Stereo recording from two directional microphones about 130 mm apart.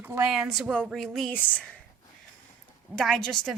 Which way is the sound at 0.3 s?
Centre (ahead or behind).